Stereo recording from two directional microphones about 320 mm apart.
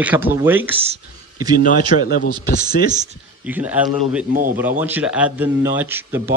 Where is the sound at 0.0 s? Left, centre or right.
Centre.